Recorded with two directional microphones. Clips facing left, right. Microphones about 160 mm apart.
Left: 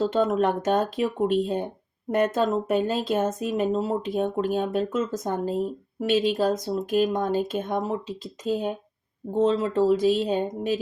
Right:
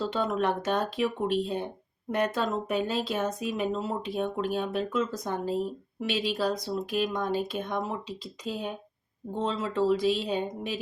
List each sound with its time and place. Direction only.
0.1 s speech: 45° left (ahead or behind)